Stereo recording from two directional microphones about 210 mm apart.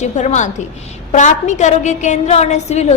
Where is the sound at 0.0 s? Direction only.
35° left (ahead or behind).